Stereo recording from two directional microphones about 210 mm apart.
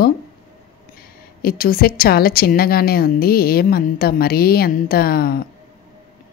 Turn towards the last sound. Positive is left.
turn(degrees=45)  # may be behind; listen again after turning